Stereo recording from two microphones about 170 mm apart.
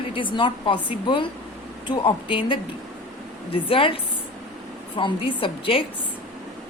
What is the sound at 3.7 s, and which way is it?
Speech, 30° left (ahead or behind).